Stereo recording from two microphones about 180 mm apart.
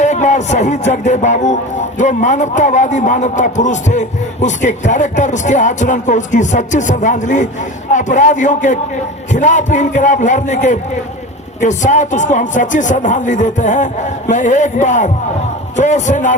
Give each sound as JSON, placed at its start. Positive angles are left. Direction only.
{"t": 0.0, "sound": "a man's voice", "side_deg": 40}